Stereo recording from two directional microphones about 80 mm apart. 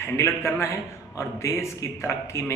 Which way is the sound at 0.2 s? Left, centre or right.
Left.